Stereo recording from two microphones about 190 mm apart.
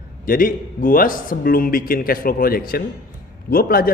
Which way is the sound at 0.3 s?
50° left (ahead or behind).